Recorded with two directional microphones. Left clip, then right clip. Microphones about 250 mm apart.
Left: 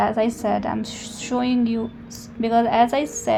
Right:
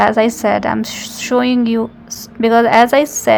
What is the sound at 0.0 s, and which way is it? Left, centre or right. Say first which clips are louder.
A woman's voice: right 8 dB; right.